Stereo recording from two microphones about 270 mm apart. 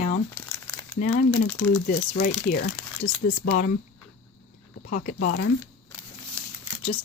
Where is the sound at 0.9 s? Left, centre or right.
Left.